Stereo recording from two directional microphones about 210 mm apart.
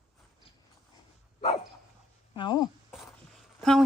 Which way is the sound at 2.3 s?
20° left (ahead or behind).